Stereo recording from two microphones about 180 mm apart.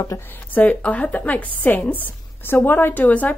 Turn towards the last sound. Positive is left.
turn(degrees=10)  # may be behind; listen again after turning